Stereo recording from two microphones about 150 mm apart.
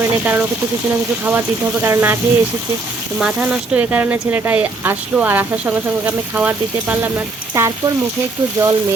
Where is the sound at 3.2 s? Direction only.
5° right (ahead or behind).